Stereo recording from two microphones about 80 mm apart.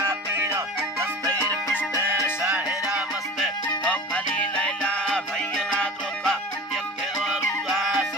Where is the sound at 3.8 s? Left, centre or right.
Centre.